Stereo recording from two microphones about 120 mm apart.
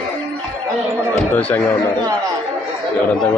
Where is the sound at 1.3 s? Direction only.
15° left (ahead or behind).